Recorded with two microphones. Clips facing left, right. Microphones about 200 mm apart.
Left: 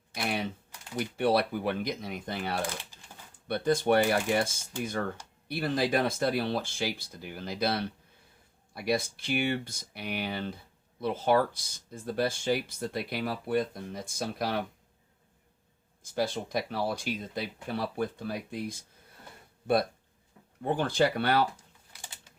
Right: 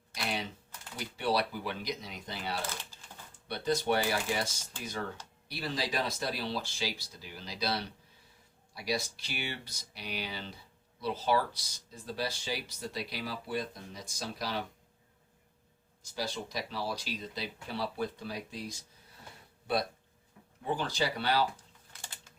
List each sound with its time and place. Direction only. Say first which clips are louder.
0.1 s typing: left 4 dB; 55° left (ahead or behind)
0.9 s speech: left 5 dB; 55° left (ahead or behind)
16.1 s speech: left 7 dB; 55° left (ahead or behind)
20.6 s speech: left 6 dB; 55° left (ahead or behind)